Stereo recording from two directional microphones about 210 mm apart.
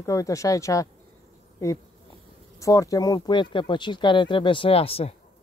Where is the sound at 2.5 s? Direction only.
15° left (ahead or behind).